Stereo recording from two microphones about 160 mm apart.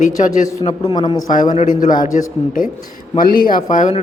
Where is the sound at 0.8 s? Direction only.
25° left (ahead or behind).